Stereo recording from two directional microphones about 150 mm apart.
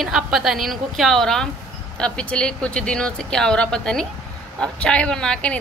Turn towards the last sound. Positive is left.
turn(degrees=5)  # may be behind; listen again after turning